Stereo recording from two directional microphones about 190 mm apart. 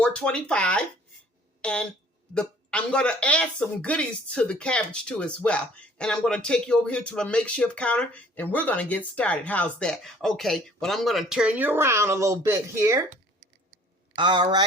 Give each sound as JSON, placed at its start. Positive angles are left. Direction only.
{"t": 0.0, "sound": "speech", "side_deg": 5}
{"t": 14.2, "sound": "speech", "side_deg": -25}